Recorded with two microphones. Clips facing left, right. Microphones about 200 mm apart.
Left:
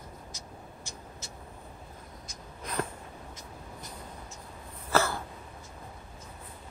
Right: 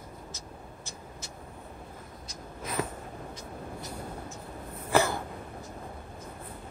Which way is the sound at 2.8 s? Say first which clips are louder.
Right 1 dB; 5° right (ahead or behind).